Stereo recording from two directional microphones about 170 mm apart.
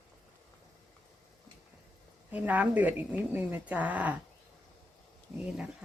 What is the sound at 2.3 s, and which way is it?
Speech, 10° right (ahead or behind).